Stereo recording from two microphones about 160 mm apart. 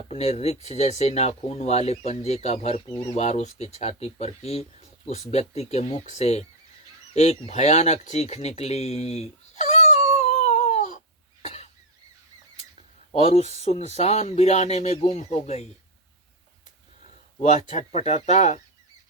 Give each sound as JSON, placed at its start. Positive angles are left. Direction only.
{"t": 0.1, "sound": "speech", "side_deg": 40}
{"t": 10.2, "sound": "a sound", "side_deg": 45}
{"t": 11.4, "sound": "cough", "side_deg": 40}
{"t": 13.1, "sound": "speech", "side_deg": 35}
{"t": 17.4, "sound": "speech", "side_deg": 50}